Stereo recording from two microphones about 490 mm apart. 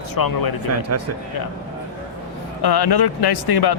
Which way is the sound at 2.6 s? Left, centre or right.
Left.